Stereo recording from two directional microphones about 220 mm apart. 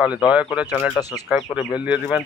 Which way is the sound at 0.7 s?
15° left (ahead or behind).